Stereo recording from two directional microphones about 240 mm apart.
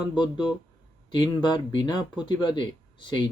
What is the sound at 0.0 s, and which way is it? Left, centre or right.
Speech, centre.